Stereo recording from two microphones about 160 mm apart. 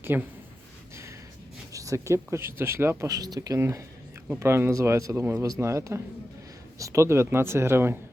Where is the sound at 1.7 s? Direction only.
20° right (ahead or behind).